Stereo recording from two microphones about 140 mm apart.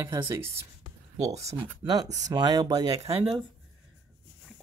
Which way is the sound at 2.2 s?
30° right (ahead or behind).